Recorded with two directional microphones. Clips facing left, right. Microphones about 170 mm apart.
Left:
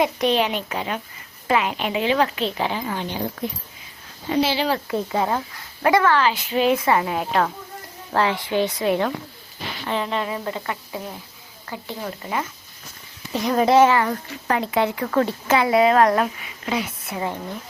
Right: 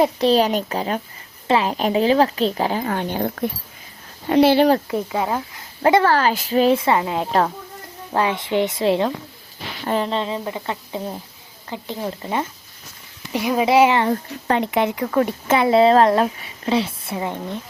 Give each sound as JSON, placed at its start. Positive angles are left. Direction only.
{"t": 0.0, "sound": "a woman's voice", "side_deg": -35}
{"t": 5.1, "sound": "speech", "side_deg": -5}
{"t": 5.8, "sound": "a woman's voice", "side_deg": -30}
{"t": 8.1, "sound": "speech", "side_deg": -20}
{"t": 9.8, "sound": "speech", "side_deg": -35}
{"t": 13.3, "sound": "speech", "side_deg": -10}
{"t": 13.8, "sound": "speech", "side_deg": -25}